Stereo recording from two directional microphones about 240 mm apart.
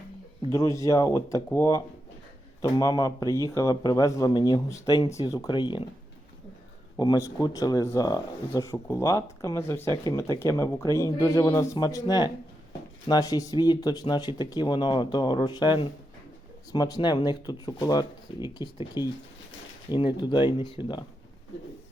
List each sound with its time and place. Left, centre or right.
0.5 s speech: centre
6.9 s speech: centre